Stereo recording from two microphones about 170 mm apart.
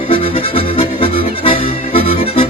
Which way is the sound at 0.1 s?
35° left (ahead or behind).